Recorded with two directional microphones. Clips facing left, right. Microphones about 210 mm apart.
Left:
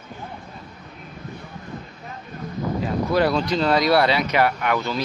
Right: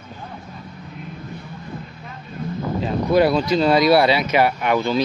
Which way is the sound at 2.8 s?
15° right (ahead or behind).